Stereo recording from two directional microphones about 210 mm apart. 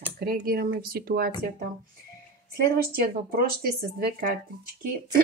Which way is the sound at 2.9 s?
45° right (ahead or behind).